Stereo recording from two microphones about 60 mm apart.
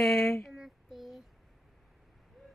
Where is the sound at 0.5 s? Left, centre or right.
Centre.